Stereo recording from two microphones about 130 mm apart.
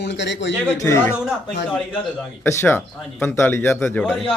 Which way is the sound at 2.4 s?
20° left (ahead or behind).